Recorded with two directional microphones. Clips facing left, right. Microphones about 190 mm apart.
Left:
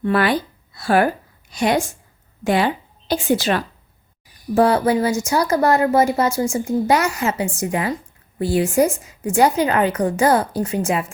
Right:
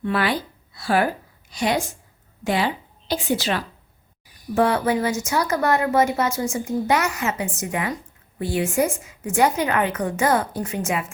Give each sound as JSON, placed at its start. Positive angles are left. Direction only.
{"t": 0.0, "sound": "a woman's voice", "side_deg": 50}
{"t": 4.5, "sound": "a woman's voice", "side_deg": 35}